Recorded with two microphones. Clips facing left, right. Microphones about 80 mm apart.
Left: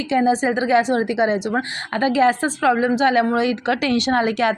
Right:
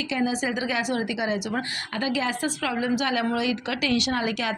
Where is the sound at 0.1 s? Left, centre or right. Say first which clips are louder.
Left 9 dB; left.